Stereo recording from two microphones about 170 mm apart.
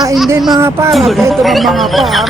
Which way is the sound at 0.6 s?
15° right (ahead or behind).